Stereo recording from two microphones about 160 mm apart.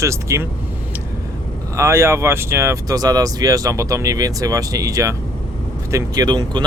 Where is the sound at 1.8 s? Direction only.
15° right (ahead or behind).